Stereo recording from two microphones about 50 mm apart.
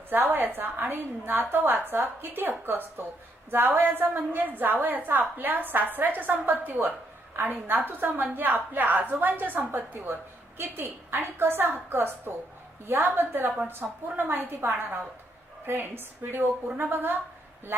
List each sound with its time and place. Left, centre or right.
0.1 s a woman's voice: right